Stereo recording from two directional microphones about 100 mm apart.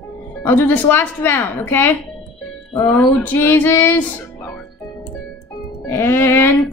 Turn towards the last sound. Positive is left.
turn(degrees=25)  # may be behind; listen again after turning